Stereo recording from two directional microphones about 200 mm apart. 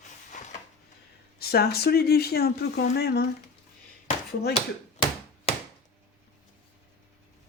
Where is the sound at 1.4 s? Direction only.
50° left (ahead or behind).